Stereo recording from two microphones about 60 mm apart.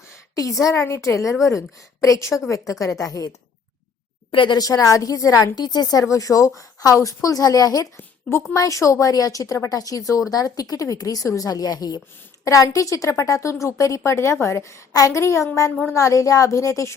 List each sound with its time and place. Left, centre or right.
0.3 s a woman's voice: left
4.5 s a woman's voice: left
6.6 s a woman's voice: left
7.9 s a woman's voice: left
8.5 s a woman's voice: left
9.6 s speech: left
12.5 s a woman's voice: left
14.9 s a woman's voice: left
15.2 s a woman's voice: left